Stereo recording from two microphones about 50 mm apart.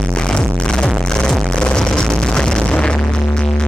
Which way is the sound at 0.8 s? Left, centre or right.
Centre.